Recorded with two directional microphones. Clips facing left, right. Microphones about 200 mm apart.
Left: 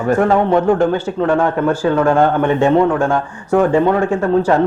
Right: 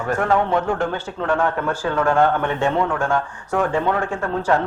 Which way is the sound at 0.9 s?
15° left (ahead or behind).